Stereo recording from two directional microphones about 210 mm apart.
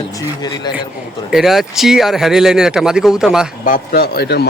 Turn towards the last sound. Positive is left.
turn(degrees=50)  # may be behind; listen again after turning